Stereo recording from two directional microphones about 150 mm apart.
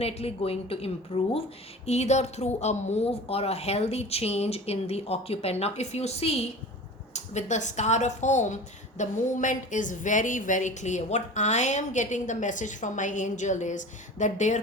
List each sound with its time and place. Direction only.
0.0 s a woman's voice: 40° left (ahead or behind)